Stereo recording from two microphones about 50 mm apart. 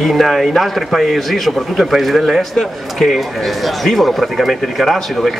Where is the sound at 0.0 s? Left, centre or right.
Centre.